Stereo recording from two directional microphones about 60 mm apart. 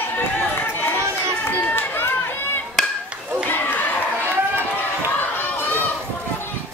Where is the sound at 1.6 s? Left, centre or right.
Left.